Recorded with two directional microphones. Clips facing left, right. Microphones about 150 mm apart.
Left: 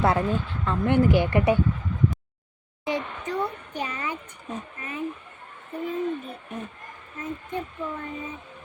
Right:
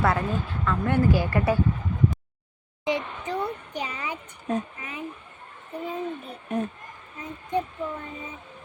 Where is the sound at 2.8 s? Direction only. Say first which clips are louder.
Right 1 dB; 15° right (ahead or behind).